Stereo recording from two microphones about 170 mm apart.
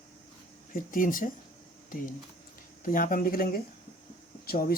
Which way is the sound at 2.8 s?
55° left (ahead or behind).